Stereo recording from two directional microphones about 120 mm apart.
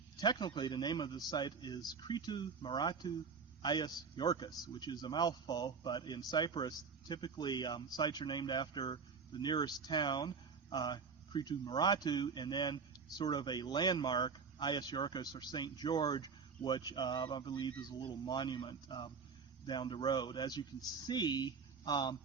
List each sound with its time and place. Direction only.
0.2 s speech: 35° left (ahead or behind)